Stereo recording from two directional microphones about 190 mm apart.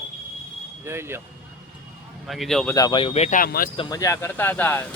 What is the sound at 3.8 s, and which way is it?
Speech, 20° left (ahead or behind).